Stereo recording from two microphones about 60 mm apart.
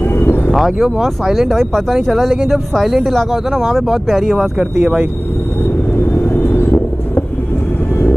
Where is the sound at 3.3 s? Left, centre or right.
Centre.